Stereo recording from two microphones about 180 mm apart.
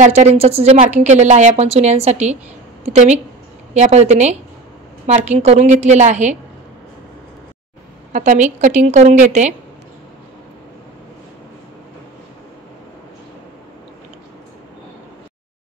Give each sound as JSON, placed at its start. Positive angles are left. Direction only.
{"t": 0.0, "sound": "a woman's voice", "side_deg": -40}
{"t": 8.1, "sound": "a woman's voice", "side_deg": -45}